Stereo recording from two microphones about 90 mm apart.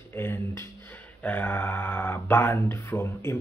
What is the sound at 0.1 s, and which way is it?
Speech, 25° left (ahead or behind).